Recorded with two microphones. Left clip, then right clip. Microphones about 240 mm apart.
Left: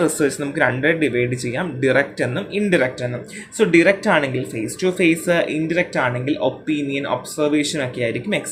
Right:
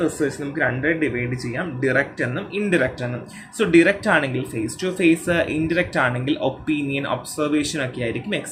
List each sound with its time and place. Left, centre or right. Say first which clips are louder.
0.0 s speech: left 4 dB; left